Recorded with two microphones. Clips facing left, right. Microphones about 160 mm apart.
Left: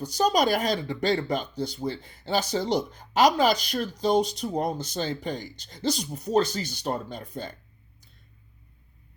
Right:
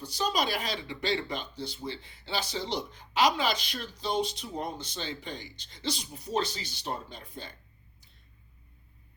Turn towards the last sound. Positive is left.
turn(degrees=45)  # may be behind; listen again after turning